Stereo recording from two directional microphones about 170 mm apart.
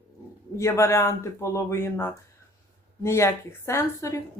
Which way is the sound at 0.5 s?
15° left (ahead or behind).